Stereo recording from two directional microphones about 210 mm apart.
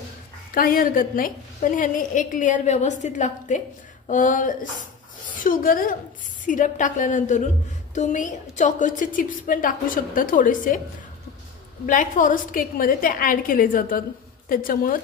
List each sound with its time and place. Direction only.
0.6 s a woman's voice: 40° left (ahead or behind)
11.8 s a woman's voice: 40° left (ahead or behind)